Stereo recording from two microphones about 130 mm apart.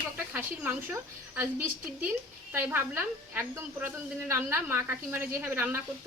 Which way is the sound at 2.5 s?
15° right (ahead or behind).